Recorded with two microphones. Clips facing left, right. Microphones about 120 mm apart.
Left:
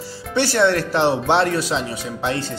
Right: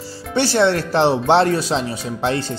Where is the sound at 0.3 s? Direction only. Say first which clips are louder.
Right 1 dB; 30° right (ahead or behind).